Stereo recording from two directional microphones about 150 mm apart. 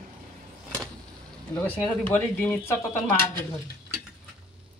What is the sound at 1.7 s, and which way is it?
Speech, 10° left (ahead or behind).